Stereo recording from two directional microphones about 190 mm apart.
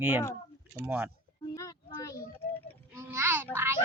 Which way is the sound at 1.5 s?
20° left (ahead or behind).